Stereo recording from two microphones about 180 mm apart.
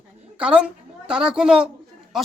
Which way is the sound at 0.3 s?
5° right (ahead or behind).